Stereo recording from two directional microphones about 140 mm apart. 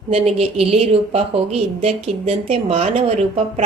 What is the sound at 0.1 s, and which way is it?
A woman's voice, 45° right (ahead or behind).